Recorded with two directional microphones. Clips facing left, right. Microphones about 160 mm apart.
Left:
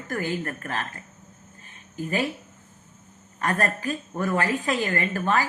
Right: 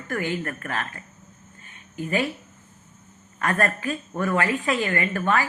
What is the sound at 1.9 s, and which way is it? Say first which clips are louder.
Speech: right 1 dB; 35° left (ahead or behind).